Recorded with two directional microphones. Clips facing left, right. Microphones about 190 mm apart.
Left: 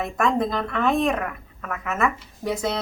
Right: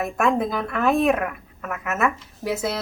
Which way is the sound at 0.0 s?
5° right (ahead or behind).